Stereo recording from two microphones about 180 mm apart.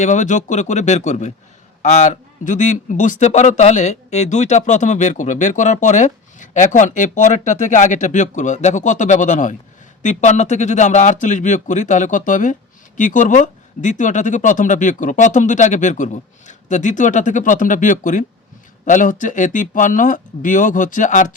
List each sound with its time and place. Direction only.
0.0 s a man's voice: 40° left (ahead or behind)